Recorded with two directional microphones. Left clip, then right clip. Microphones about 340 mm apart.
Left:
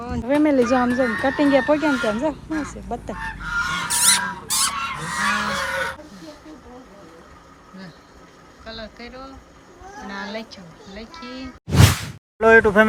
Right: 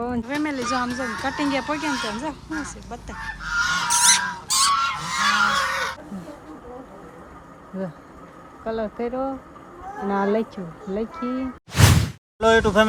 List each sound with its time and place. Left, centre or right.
0.0 s speech: centre
3.6 s goose: centre
8.6 s speech: centre